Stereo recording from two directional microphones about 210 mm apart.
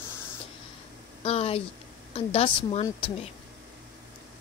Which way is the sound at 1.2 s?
30° left (ahead or behind).